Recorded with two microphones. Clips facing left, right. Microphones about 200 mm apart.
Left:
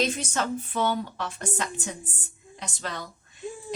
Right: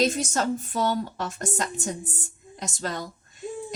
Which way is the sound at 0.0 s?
40° right (ahead or behind).